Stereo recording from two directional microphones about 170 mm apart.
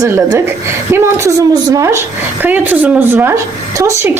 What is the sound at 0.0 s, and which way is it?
Speech, 20° right (ahead or behind).